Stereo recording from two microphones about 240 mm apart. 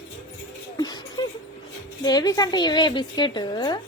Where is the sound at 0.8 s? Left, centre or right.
Centre.